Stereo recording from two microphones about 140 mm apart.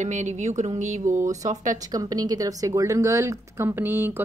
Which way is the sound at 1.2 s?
25° right (ahead or behind).